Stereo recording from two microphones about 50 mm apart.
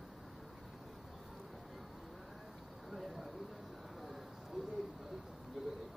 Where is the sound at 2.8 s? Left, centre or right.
Centre.